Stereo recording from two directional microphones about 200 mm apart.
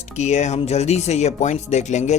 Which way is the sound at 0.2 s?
35° left (ahead or behind).